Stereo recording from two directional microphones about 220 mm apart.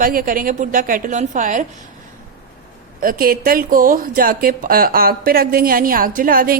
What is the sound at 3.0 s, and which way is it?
Speech, 40° right (ahead or behind).